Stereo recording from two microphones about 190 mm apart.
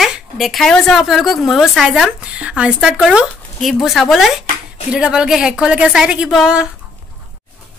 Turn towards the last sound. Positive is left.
turn(degrees=-5)  # may be behind; listen again after turning